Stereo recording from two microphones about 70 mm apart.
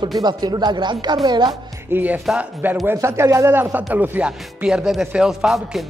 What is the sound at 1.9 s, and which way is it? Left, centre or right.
A man's voice, right.